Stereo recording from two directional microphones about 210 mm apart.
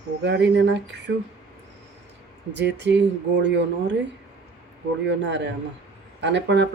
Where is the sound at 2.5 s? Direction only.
55° right (ahead or behind).